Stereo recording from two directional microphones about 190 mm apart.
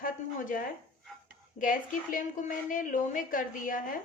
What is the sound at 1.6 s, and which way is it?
A woman's voice, 45° left (ahead or behind).